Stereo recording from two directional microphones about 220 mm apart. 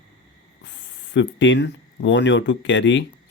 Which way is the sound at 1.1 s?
55° left (ahead or behind).